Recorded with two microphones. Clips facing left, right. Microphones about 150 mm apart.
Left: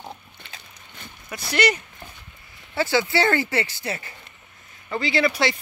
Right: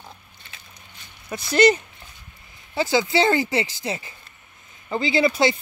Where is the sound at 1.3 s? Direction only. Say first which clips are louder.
Right 4 dB; 30° right (ahead or behind).